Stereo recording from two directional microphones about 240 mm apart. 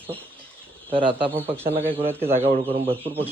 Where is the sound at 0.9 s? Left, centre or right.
Right.